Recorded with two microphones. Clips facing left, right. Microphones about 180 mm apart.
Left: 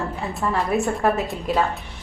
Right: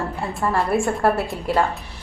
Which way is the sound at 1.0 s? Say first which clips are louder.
Right 1 dB; 5° right (ahead or behind).